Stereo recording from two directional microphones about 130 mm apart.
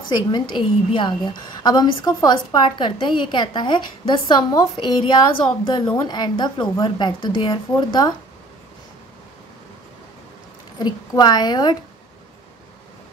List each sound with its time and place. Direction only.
0.3 s a woman's voice: 35° left (ahead or behind)
10.8 s a woman's voice: 35° left (ahead or behind)